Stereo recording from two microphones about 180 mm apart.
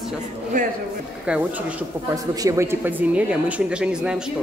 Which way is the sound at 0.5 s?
50° right (ahead or behind).